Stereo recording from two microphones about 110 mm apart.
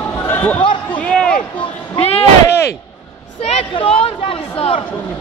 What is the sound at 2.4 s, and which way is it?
Speech, 25° left (ahead or behind).